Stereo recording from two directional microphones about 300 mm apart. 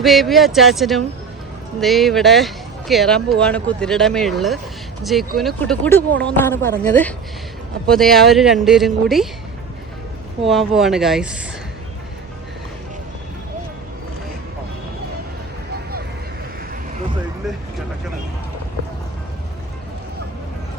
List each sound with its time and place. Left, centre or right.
0.0 s speech: centre
10.4 s speech: centre